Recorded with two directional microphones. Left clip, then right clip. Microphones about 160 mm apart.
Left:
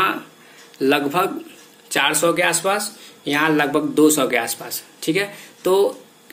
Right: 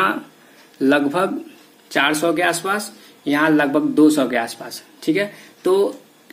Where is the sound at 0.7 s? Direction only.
30° right (ahead or behind).